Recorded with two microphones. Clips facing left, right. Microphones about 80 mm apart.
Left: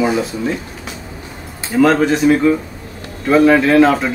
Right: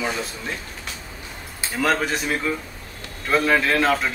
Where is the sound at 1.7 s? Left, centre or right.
Centre.